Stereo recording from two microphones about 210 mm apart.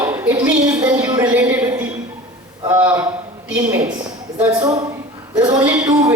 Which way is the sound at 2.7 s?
5° right (ahead or behind).